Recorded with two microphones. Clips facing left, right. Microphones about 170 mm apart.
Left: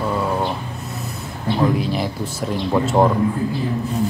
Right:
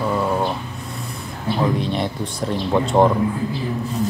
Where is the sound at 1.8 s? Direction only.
5° left (ahead or behind).